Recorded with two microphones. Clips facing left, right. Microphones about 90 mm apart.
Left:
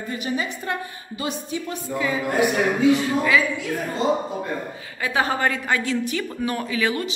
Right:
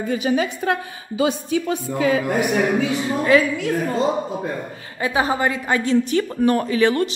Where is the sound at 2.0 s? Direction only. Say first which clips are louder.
Right 5 dB; 70° right (ahead or behind).